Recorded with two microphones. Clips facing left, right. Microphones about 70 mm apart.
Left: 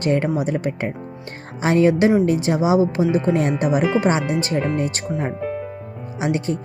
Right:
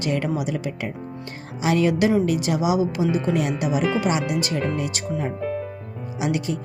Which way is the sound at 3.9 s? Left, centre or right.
Left.